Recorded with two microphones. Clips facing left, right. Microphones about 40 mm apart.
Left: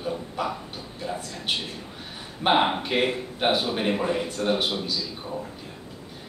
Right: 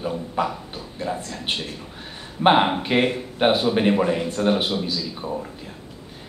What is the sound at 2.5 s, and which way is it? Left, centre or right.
Speech, centre.